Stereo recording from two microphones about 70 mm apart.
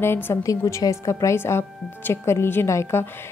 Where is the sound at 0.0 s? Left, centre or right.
Left.